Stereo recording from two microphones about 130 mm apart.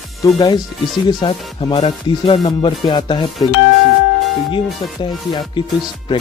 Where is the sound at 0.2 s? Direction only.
25° left (ahead or behind).